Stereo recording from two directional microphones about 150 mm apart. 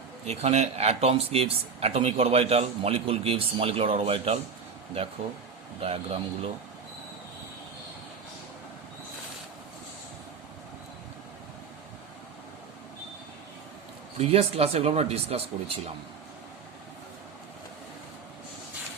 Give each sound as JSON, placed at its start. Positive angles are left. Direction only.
{"t": 0.3, "sound": "speech", "side_deg": -45}
{"t": 5.8, "sound": "speech", "side_deg": -40}
{"t": 14.2, "sound": "speech", "side_deg": -40}